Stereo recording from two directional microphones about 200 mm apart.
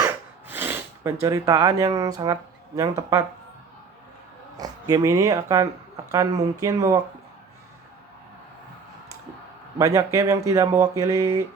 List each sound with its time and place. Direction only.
0.0 s a sound: 10° right (ahead or behind)
4.5 s speech: 20° right (ahead or behind)
9.7 s speech: 15° right (ahead or behind)